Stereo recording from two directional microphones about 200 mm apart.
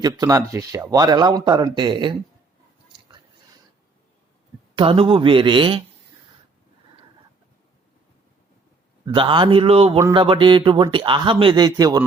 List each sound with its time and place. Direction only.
0.0 s speech: 15° right (ahead or behind)
4.7 s speech: 25° right (ahead or behind)
9.0 s speech: 25° right (ahead or behind)